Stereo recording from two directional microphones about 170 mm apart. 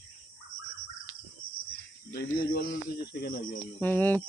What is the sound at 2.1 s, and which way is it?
Speech, 70° left (ahead or behind).